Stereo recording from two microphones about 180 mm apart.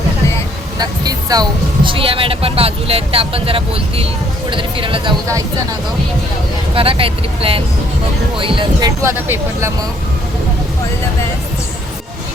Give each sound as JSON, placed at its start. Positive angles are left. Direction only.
{"t": 0.8, "sound": "speech", "side_deg": -20}
{"t": 6.7, "sound": "speech", "side_deg": -30}
{"t": 9.0, "sound": "speech", "side_deg": -15}